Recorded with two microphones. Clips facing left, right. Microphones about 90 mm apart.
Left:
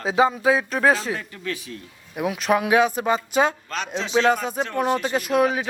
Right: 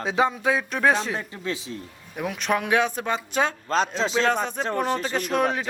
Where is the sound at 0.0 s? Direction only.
Centre (ahead or behind).